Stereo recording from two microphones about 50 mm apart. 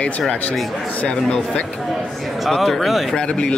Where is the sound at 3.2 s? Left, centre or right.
Left.